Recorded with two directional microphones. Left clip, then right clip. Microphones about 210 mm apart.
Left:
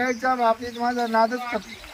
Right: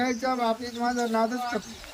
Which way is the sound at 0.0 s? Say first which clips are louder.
Left 5 dB; 10° right (ahead or behind).